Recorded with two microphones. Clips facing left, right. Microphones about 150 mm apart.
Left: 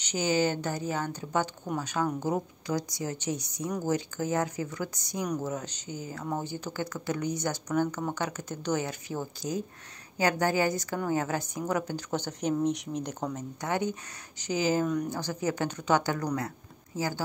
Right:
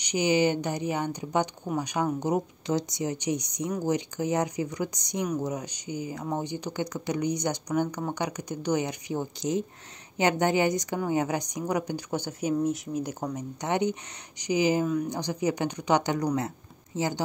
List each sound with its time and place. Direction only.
0.0 s a woman's voice: 15° right (ahead or behind)